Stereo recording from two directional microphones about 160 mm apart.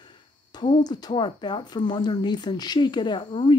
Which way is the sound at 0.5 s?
30° left (ahead or behind).